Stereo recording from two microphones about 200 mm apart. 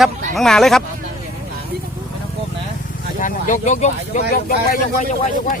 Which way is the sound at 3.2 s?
40° left (ahead or behind).